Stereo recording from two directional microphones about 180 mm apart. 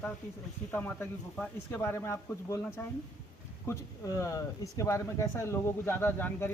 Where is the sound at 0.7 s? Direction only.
10° left (ahead or behind).